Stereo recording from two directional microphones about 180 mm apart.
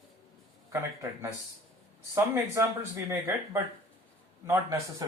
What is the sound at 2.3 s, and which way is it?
Speech, 20° right (ahead or behind).